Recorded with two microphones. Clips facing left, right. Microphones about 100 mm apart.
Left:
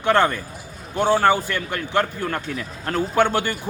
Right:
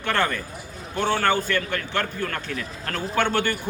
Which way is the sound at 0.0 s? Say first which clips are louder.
Left 6 dB; 20° left (ahead or behind).